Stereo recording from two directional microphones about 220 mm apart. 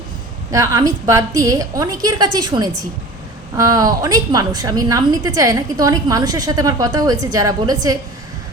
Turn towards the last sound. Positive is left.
turn(degrees=-15)  # may be behind; listen again after turning